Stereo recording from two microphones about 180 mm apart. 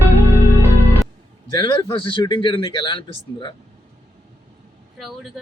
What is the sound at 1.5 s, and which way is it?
Speech, 25° left (ahead or behind).